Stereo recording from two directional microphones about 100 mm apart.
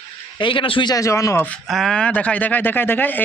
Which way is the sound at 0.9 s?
30° left (ahead or behind).